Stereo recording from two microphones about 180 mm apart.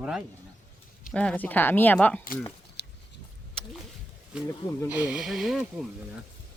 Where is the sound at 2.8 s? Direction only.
70° left (ahead or behind).